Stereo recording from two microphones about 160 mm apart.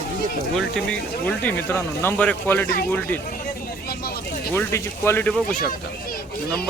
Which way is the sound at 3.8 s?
75° left (ahead or behind).